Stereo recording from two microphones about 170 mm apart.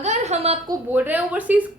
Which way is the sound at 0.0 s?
40° right (ahead or behind).